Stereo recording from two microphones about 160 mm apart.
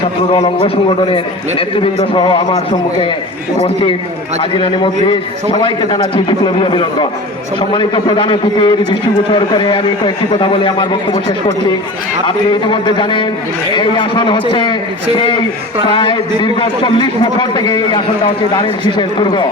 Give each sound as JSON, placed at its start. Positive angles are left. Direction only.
{"t": 0.4, "sound": "a man's voice", "side_deg": 30}
{"t": 4.5, "sound": "a man's voice", "side_deg": 35}